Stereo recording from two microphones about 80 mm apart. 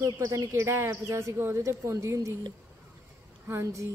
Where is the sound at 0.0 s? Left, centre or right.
Right.